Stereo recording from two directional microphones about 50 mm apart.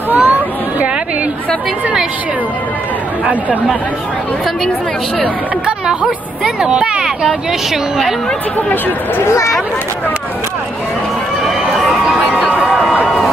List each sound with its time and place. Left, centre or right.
0.1 s chatter: right
6.4 s speech: centre
7.2 s a woman's voice: centre
8.5 s speech: left
11.9 s a sound: centre
12.6 s a sound: centre